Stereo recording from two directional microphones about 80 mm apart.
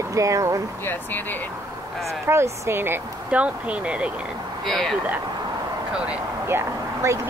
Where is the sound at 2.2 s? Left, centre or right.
Right.